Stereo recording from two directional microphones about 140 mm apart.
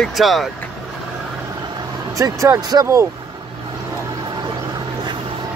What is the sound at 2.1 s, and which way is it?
Speech, 25° right (ahead or behind).